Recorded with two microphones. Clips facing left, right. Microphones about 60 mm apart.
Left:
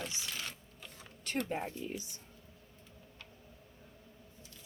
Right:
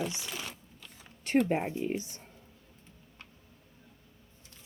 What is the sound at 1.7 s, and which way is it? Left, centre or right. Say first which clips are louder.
Speech: right 8 dB; right.